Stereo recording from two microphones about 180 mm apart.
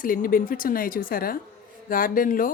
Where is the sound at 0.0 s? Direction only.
50° left (ahead or behind).